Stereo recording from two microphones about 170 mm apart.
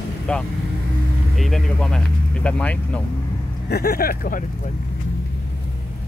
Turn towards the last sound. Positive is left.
turn(degrees=55)  # may be behind; listen again after turning